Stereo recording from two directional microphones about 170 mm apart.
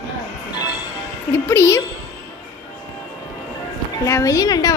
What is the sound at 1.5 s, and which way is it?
Speech, 15° left (ahead or behind).